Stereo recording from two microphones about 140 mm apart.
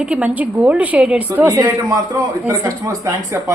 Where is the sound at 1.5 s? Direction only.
25° right (ahead or behind).